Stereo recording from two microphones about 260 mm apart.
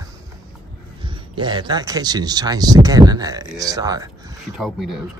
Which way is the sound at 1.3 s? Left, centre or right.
Centre.